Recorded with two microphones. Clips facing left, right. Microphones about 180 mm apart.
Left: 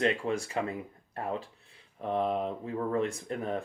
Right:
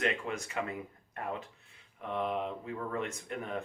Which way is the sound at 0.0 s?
30° left (ahead or behind).